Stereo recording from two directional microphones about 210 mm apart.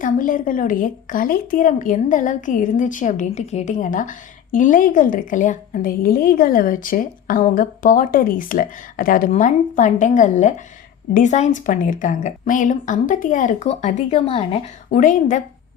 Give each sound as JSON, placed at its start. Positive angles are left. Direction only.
{"t": 0.0, "sound": "a woman's voice", "side_deg": 40}